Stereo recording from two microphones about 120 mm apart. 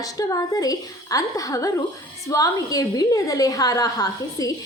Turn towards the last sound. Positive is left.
turn(degrees=30)  # may be behind; listen again after turning